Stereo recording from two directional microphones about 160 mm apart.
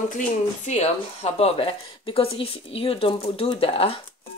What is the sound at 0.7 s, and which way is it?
Speech, 40° left (ahead or behind).